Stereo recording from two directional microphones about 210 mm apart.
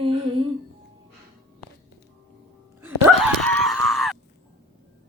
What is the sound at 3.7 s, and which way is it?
Screaming, centre (ahead or behind).